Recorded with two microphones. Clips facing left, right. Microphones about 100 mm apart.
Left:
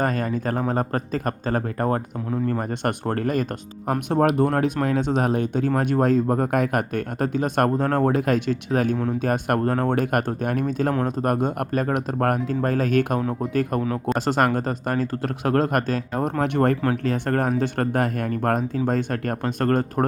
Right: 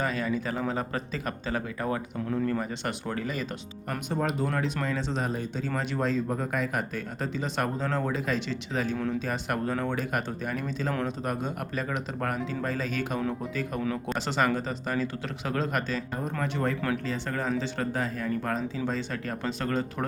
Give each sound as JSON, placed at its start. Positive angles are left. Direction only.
{"t": 0.0, "sound": "speech", "side_deg": 50}
{"t": 16.4, "sound": "speech", "side_deg": 65}